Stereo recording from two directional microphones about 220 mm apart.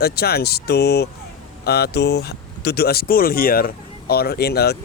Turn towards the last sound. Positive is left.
turn(degrees=45)  # may be behind; listen again after turning